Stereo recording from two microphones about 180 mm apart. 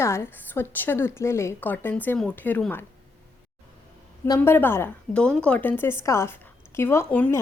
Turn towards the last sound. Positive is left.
turn(degrees=10)  # may be behind; listen again after turning